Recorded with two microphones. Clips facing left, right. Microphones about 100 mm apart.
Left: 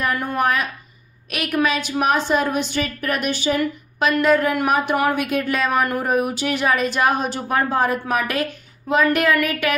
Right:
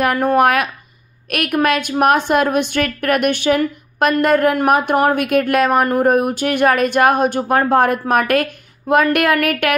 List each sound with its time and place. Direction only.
0.0 s speech: 60° right (ahead or behind)
1.3 s speech: 55° right (ahead or behind)